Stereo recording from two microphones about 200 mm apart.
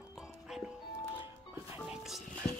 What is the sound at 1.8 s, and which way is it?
Music, centre (ahead or behind).